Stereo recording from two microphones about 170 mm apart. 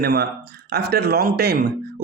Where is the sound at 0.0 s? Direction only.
65° right (ahead or behind).